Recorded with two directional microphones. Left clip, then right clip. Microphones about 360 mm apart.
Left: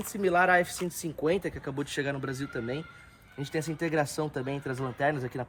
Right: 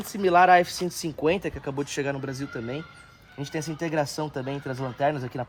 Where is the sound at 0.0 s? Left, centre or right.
Right.